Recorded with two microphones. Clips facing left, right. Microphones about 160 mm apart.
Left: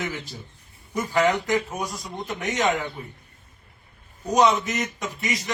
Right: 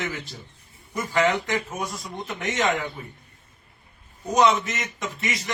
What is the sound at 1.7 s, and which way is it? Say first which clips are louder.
Speech: left 1 dB; centre (ahead or behind).